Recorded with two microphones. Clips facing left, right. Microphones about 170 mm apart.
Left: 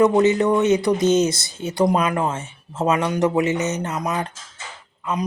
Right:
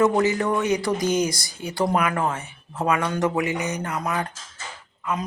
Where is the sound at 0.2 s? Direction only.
20° left (ahead or behind).